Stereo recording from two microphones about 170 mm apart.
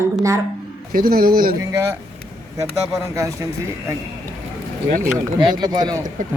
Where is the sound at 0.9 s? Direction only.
60° right (ahead or behind).